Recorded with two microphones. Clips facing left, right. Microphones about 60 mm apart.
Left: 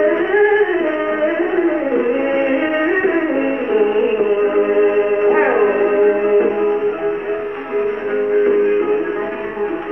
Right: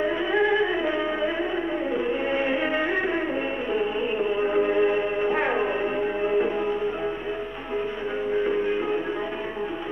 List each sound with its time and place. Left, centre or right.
0.0 s music: left
1.2 s music: left
8.5 s music: left